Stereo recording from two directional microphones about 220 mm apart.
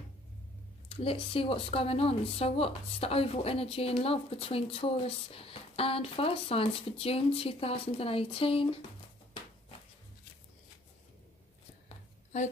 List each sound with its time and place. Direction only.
0.8 s speech: 25° left (ahead or behind)